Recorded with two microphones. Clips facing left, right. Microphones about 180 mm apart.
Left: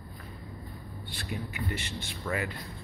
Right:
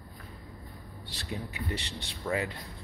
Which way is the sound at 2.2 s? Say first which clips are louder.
Right 2 dB; 20° right (ahead or behind).